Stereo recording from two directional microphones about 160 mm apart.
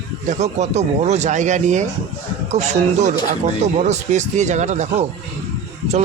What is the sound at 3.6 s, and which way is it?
Speech, 45° right (ahead or behind).